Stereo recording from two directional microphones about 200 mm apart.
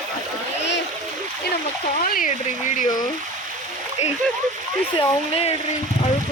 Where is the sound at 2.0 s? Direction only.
45° left (ahead or behind).